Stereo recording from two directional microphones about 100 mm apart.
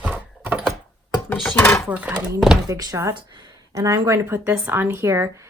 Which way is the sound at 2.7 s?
35° right (ahead or behind).